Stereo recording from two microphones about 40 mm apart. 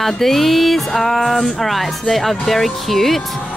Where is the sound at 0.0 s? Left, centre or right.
Centre.